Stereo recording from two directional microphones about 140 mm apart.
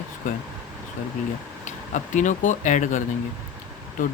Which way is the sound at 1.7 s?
60° left (ahead or behind).